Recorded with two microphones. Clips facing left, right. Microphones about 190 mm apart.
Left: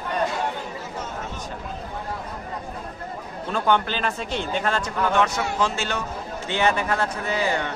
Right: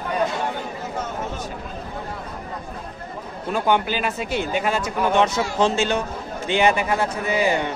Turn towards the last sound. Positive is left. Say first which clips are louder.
# right 4 dB
turn(degrees=-15)  # may be behind; listen again after turning